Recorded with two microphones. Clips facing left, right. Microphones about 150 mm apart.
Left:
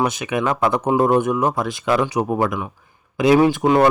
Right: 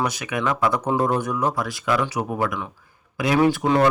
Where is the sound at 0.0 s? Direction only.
25° left (ahead or behind).